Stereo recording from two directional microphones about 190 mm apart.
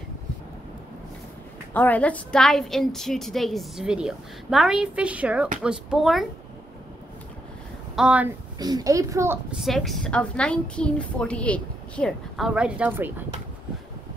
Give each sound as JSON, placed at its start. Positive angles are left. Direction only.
{"t": 1.7, "sound": "a woman's voice", "side_deg": 10}
{"t": 7.9, "sound": "speech", "side_deg": -5}
{"t": 8.5, "sound": "a woman's voice", "side_deg": -20}
{"t": 9.6, "sound": "a woman's voice", "side_deg": 0}